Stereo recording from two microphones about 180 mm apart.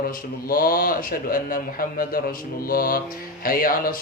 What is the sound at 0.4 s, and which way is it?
Mantra, 55° left (ahead or behind).